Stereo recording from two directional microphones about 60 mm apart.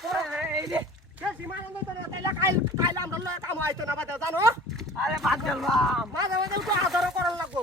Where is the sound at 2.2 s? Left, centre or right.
Right.